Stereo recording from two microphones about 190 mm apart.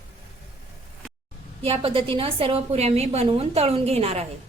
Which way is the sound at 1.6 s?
30° right (ahead or behind).